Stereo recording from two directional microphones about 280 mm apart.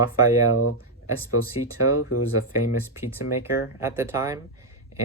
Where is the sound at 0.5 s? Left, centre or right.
Left.